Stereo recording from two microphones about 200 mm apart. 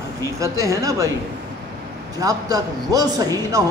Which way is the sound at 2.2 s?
15° right (ahead or behind).